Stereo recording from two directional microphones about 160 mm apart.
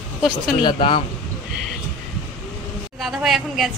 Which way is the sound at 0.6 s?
30° left (ahead or behind).